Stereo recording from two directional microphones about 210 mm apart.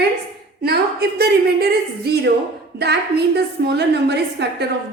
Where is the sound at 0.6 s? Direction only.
50° right (ahead or behind).